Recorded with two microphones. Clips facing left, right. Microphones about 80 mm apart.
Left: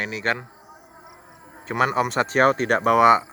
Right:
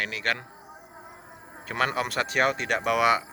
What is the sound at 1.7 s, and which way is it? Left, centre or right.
Speech, left.